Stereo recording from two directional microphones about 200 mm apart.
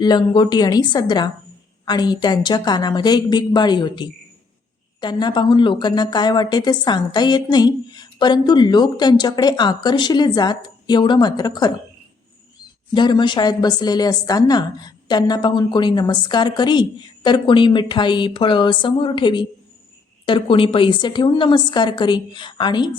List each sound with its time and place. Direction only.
0.0 s a woman's voice: 20° left (ahead or behind)
12.9 s a woman's voice: 20° left (ahead or behind)